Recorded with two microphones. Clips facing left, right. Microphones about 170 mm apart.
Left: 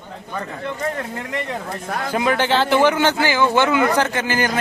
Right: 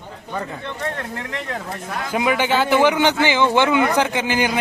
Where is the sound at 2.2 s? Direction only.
10° right (ahead or behind).